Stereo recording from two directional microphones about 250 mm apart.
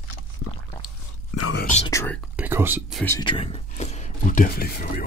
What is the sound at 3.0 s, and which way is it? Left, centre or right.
Speech, centre.